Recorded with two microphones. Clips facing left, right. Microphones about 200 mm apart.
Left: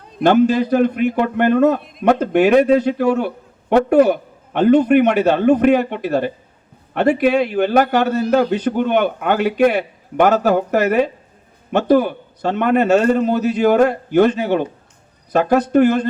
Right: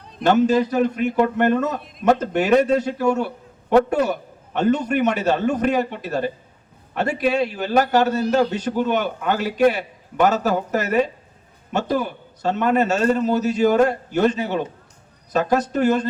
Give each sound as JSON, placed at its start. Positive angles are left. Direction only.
{"t": 0.2, "sound": "a man's voice", "side_deg": 60}